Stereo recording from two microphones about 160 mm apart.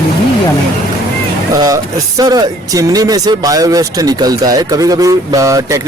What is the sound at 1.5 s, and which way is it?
Speech, 20° right (ahead or behind).